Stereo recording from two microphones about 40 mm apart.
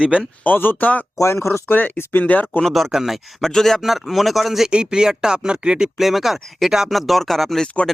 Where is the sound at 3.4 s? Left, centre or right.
Centre.